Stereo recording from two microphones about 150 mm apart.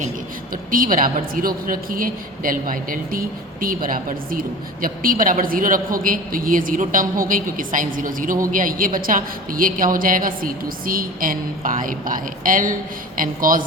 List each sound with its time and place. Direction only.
0.5 s a woman's voice: 70° right (ahead or behind)